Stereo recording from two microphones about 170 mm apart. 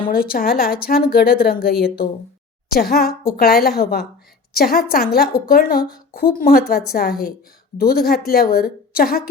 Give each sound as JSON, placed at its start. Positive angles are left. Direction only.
{"t": 0.1, "sound": "a woman's voice", "side_deg": 60}
{"t": 2.7, "sound": "a woman's voice", "side_deg": 60}